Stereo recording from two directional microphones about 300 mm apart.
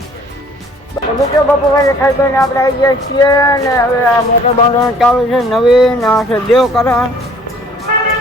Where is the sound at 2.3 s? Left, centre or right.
Centre.